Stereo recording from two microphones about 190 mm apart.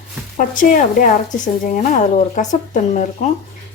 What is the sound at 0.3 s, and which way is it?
Speech, 45° left (ahead or behind).